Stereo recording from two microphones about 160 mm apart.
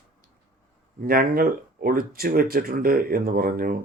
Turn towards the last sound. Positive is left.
turn(degrees=-65)  # may be behind; listen again after turning